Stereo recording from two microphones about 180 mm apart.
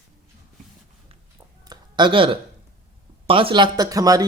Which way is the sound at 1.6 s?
25° right (ahead or behind).